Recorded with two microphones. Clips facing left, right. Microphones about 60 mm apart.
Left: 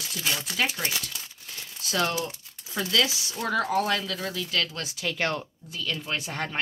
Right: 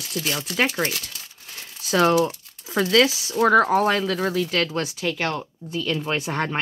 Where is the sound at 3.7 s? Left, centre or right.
Right.